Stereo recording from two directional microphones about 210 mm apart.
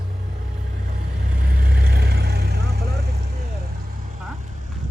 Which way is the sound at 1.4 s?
50° right (ahead or behind).